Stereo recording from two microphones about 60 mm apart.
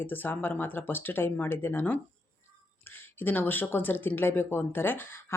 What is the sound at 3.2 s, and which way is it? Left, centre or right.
Speech, left.